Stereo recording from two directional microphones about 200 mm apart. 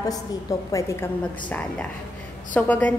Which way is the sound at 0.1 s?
15° left (ahead or behind).